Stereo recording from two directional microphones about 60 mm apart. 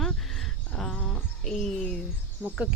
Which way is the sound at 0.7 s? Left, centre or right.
Centre.